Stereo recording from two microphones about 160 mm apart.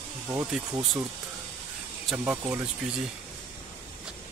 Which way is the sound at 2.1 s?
10° right (ahead or behind).